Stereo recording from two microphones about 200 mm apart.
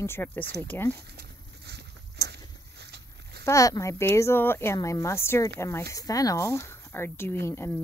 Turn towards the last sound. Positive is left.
turn(degrees=10)  # may be behind; listen again after turning